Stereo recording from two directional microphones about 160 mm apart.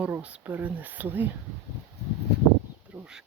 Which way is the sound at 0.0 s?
10° right (ahead or behind).